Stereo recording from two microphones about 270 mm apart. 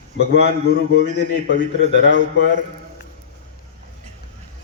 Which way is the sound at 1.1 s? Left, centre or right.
Left.